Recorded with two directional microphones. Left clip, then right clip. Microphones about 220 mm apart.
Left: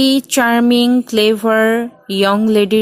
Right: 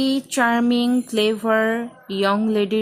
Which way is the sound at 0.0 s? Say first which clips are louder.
Left 6 dB; 25° left (ahead or behind).